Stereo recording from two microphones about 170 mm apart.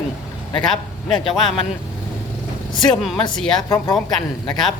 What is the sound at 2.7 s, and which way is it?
Speech, centre (ahead or behind).